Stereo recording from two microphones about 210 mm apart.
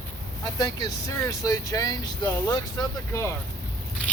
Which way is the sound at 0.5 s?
15° left (ahead or behind).